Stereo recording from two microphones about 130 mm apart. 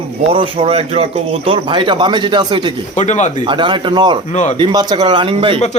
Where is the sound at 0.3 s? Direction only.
45° right (ahead or behind).